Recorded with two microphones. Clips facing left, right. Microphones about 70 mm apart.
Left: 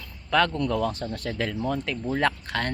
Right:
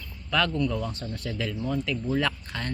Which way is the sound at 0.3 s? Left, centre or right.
Left.